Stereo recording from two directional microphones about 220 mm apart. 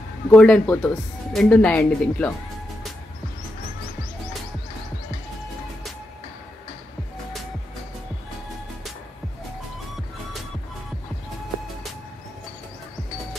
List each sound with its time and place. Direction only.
0.3 s a woman's voice: 5° left (ahead or behind)